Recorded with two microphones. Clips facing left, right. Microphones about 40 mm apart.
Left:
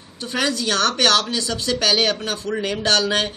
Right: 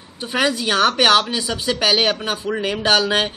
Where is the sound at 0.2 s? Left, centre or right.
Centre.